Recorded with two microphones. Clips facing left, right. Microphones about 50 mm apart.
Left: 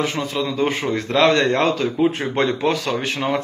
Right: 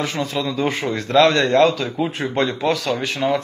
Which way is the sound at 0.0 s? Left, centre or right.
Left.